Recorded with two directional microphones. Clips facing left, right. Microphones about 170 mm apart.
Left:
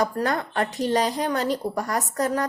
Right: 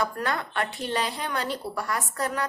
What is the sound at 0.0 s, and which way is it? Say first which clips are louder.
A woman's voice: left 4 dB; 40° left (ahead or behind).